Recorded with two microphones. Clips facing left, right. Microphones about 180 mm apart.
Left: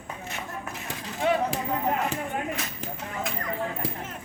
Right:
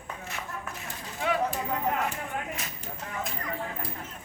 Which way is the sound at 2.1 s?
90° left.